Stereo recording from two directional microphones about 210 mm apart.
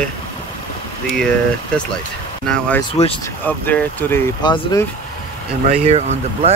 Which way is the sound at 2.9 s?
25° left (ahead or behind).